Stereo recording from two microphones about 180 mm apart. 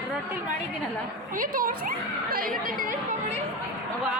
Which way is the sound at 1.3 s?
50° right (ahead or behind).